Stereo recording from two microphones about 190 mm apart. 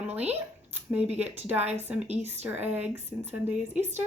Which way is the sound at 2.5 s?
10° right (ahead or behind).